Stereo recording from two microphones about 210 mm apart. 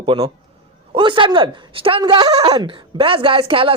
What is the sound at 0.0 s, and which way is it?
A man's voice, 25° right (ahead or behind).